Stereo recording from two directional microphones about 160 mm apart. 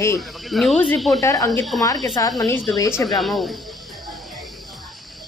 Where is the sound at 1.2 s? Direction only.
20° left (ahead or behind).